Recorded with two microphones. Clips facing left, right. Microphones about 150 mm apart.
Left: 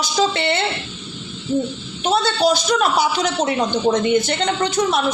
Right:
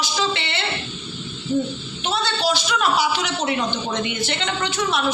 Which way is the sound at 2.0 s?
45° left (ahead or behind).